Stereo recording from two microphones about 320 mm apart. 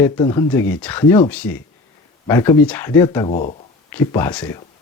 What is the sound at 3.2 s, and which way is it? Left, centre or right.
Speech, left.